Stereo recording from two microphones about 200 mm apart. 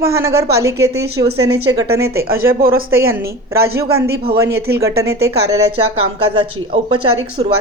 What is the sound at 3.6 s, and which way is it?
A man's voice, 50° right (ahead or behind).